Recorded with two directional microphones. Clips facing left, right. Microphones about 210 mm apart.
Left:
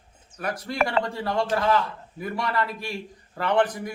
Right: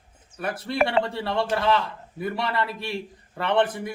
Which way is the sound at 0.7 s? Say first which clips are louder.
Right 3 dB; 30° right (ahead or behind).